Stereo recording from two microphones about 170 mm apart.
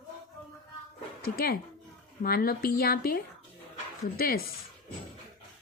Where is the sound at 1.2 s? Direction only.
65° left (ahead or behind).